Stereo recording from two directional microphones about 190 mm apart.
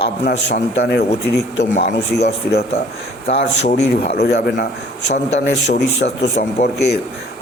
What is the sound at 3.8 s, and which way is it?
A man's voice, 60° left (ahead or behind).